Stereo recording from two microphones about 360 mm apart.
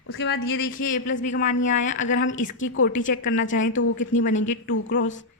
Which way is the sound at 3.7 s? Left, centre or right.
Left.